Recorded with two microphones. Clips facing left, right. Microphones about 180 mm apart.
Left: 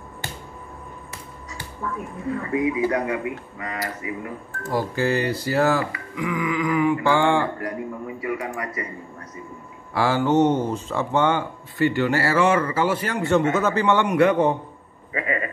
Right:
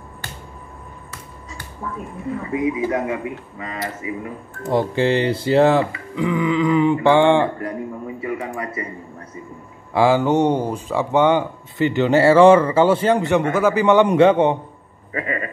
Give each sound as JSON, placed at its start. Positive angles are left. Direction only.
{"t": 2.5, "sound": "speech", "side_deg": -20}
{"t": 9.9, "sound": "speech", "side_deg": -15}
{"t": 13.3, "sound": "speech", "side_deg": -10}
{"t": 14.0, "sound": "speech", "side_deg": -25}